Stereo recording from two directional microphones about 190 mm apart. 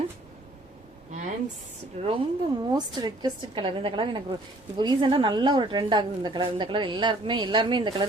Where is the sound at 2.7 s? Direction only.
20° right (ahead or behind).